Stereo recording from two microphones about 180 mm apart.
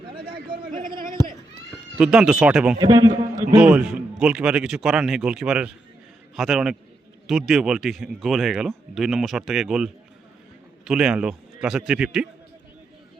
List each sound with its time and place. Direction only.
2.0 s speech: 5° right (ahead or behind)
2.7 s a man's voice: 20° right (ahead or behind)
3.5 s speech: 5° right (ahead or behind)